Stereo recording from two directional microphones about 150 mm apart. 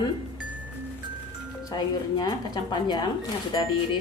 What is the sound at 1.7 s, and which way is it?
Speech, 30° left (ahead or behind).